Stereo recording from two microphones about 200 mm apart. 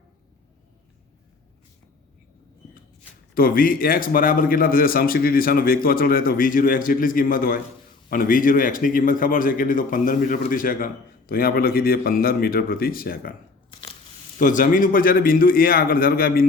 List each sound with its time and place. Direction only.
3.3 s a man's voice: 45° left (ahead or behind)
14.3 s a man's voice: 40° left (ahead or behind)